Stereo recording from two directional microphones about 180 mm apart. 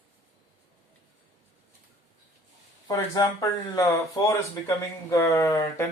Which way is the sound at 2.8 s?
25° left (ahead or behind).